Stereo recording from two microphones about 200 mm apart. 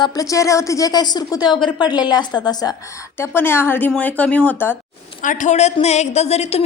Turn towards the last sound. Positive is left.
turn(degrees=30)  # may be behind; listen again after turning